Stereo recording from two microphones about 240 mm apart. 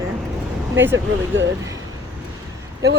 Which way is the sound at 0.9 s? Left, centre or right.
Right.